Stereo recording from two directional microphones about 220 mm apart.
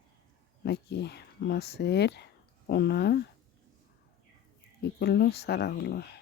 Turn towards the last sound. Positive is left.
turn(degrees=45)  # may be behind; listen again after turning